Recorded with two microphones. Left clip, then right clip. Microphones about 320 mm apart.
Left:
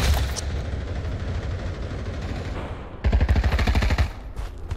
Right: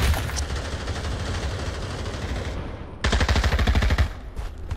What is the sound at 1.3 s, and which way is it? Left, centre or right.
Vehicle, centre.